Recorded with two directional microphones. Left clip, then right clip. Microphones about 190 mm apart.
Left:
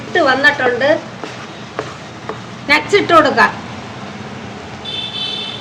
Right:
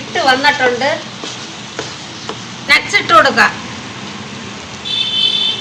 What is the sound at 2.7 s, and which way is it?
Speech, 65° left (ahead or behind).